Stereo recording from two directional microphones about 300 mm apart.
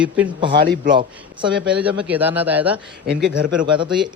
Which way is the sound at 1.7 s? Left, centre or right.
Centre.